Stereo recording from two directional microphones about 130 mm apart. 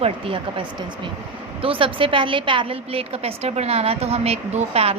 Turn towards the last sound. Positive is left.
turn(degrees=-50)  # may be behind; listen again after turning